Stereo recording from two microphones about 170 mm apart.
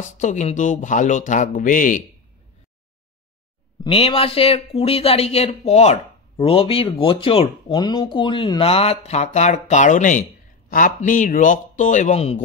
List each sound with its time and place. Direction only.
0.0 s speech: 45° left (ahead or behind)
3.8 s speech: 35° left (ahead or behind)